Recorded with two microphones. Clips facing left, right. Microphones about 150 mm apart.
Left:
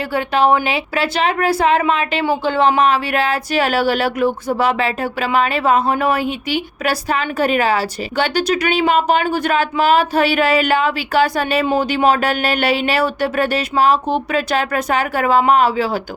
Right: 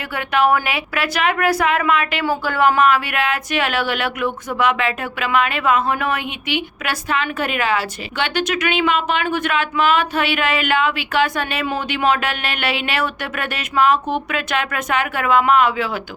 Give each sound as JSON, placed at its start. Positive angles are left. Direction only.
{"t": 0.1, "sound": "a woman's voice", "side_deg": 30}